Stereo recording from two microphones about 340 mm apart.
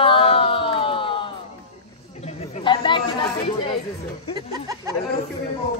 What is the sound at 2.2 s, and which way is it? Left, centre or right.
Chatter, centre.